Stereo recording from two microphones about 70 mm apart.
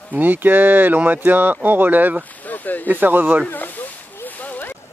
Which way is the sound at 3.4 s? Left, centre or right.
Left.